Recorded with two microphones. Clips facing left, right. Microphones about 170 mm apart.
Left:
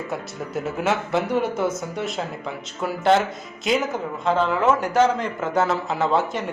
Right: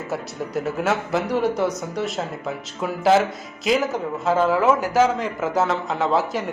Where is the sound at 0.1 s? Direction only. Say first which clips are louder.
Right 2 dB; centre (ahead or behind).